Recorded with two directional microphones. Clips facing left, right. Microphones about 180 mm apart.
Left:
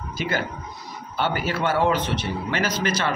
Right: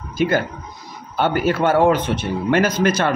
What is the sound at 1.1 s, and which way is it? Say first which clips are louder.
A man's voice: right 7 dB; 50° right (ahead or behind).